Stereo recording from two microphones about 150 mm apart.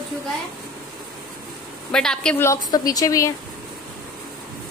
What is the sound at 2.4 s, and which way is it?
Speech, 20° left (ahead or behind).